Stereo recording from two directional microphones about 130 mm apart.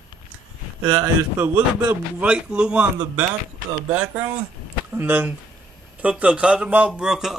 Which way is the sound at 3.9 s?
10° right (ahead or behind).